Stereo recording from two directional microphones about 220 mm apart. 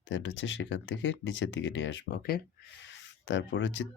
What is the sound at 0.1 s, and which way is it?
Speech, 55° left (ahead or behind).